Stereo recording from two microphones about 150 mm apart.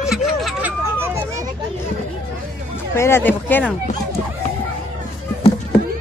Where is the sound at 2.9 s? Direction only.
15° left (ahead or behind).